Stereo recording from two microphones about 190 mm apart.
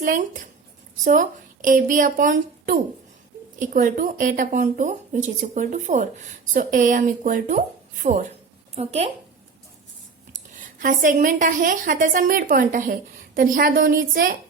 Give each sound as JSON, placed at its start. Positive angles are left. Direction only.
{"t": 0.0, "sound": "a woman's voice", "side_deg": -45}
{"t": 10.5, "sound": "speech", "side_deg": -45}